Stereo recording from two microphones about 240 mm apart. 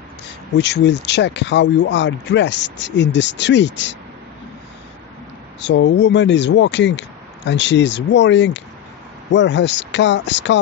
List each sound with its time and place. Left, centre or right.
0.6 s speech: left
5.6 s speech: left